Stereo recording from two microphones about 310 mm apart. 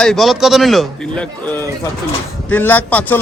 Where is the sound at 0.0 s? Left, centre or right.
Centre.